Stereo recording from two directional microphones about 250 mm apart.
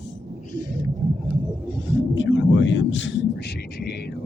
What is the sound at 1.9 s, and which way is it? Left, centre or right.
Speech, left.